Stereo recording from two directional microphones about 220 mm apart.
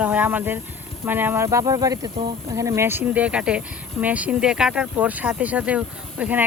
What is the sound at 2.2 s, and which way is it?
Speech, 45° right (ahead or behind).